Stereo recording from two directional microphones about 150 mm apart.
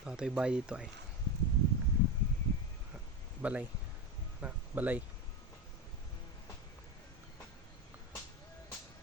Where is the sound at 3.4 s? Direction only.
10° right (ahead or behind).